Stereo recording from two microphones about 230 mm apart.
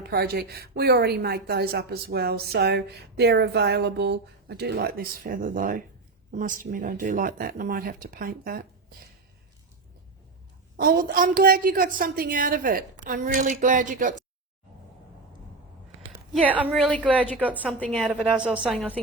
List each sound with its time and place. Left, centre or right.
0.1 s a woman's voice: right
10.8 s a woman's voice: right
16.3 s a woman's voice: centre
17.4 s a woman's voice: centre
17.7 s a woman's voice: centre